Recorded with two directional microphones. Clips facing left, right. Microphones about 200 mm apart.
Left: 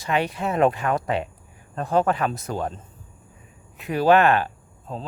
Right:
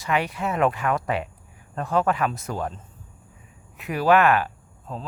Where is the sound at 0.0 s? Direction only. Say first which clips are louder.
Left 1 dB; 30° left (ahead or behind).